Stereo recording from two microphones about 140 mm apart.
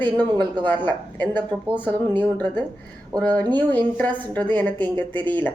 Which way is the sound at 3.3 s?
30° right (ahead or behind).